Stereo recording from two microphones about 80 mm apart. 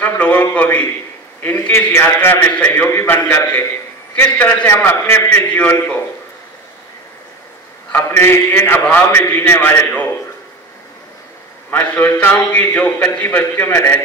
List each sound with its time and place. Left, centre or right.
0.0 s a man's voice: left
5.6 s a man's voice: centre
7.9 s a man's voice: left
11.7 s a man's voice: left